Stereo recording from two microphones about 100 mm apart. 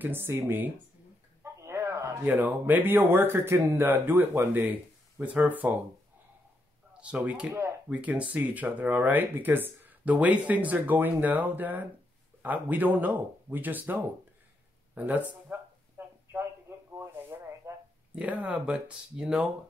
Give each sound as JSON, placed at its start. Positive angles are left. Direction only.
{"t": 0.0, "sound": "speech", "side_deg": -20}
{"t": 1.4, "sound": "a sound", "side_deg": -25}
{"t": 2.2, "sound": "speech", "side_deg": -15}
{"t": 6.9, "sound": "speech", "side_deg": -10}
{"t": 16.3, "sound": "a sound", "side_deg": -25}
{"t": 18.1, "sound": "speech", "side_deg": -15}